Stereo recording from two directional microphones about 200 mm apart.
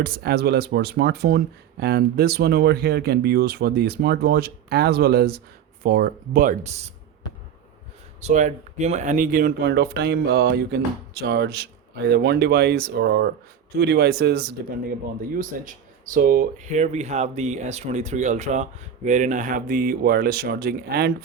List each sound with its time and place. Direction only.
0.0 s speech: 50° right (ahead or behind); by 6.9 s 35° right (ahead or behind)
8.2 s speech: 40° right (ahead or behind)